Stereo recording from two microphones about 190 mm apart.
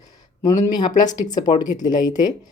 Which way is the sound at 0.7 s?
20° left (ahead or behind).